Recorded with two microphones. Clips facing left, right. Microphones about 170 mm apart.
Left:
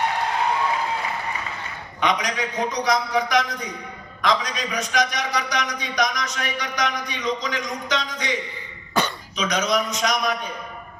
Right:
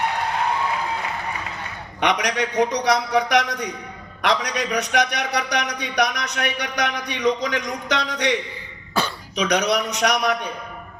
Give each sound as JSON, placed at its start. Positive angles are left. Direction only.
{"t": 2.0, "sound": "a man's voice", "side_deg": -70}